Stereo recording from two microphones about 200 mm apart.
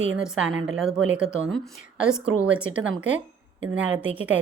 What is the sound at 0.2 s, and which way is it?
A woman's voice, 5° right (ahead or behind).